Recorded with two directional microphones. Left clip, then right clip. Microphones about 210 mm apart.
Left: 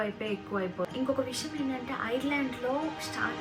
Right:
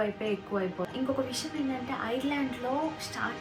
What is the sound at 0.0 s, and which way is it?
Speech, 20° left (ahead or behind).